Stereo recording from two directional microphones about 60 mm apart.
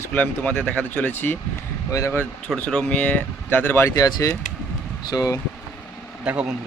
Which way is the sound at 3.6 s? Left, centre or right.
Left.